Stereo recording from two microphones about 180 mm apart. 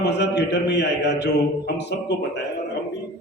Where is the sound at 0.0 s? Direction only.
70° left (ahead or behind).